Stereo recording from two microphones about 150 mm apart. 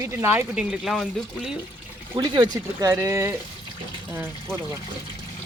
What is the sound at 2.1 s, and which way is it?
Speech, 30° right (ahead or behind).